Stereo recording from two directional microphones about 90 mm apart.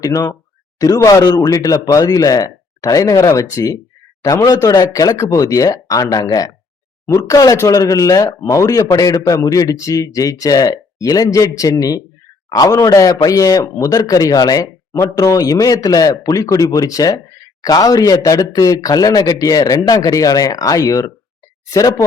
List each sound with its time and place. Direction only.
0.0 s speech: 40° left (ahead or behind)